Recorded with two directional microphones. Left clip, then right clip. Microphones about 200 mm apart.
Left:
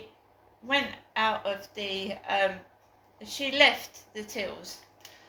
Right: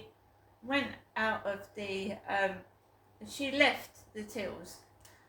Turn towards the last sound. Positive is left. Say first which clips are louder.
# left 5 dB
turn(degrees=-15)  # may be behind; listen again after turning